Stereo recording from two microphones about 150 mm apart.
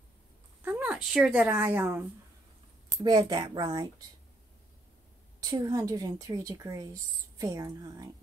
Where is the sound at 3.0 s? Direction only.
30° right (ahead or behind).